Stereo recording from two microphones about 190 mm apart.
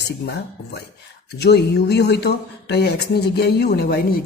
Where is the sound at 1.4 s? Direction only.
60° left (ahead or behind).